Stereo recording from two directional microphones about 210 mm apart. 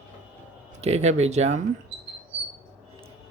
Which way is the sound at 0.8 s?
30° right (ahead or behind).